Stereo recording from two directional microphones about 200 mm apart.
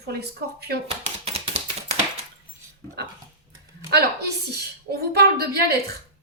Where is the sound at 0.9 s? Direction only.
30° right (ahead or behind).